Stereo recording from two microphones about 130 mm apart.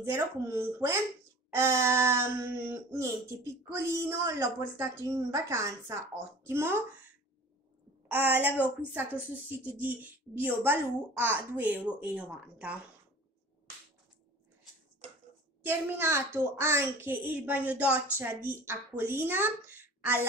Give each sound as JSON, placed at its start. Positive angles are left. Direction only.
{"t": 0.0, "sound": "speech", "side_deg": -20}
{"t": 8.1, "sound": "a woman's voice", "side_deg": -15}
{"t": 9.8, "sound": "a woman's voice", "side_deg": -15}
{"t": 15.6, "sound": "a woman's voice", "side_deg": -15}